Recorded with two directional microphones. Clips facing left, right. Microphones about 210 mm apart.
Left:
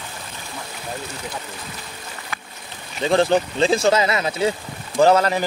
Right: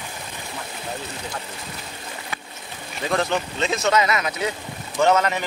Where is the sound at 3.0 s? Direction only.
30° left (ahead or behind).